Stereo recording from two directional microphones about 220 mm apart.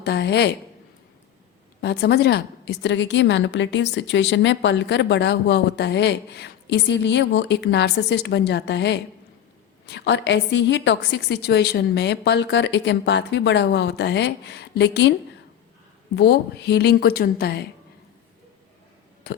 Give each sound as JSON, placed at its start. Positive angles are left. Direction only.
{"t": 0.0, "sound": "a woman's voice", "side_deg": 50}
{"t": 1.8, "sound": "a woman's voice", "side_deg": 50}
{"t": 16.1, "sound": "a woman's voice", "side_deg": 50}
{"t": 19.3, "sound": "burping", "side_deg": 45}